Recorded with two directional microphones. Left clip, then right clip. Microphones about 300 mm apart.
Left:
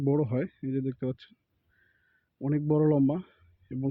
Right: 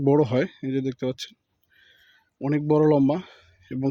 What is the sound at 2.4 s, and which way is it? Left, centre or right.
Speech, centre.